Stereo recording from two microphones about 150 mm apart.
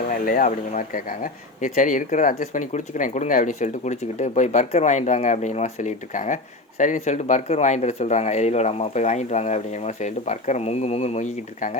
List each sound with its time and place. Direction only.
0.1 s speech: 65° left (ahead or behind)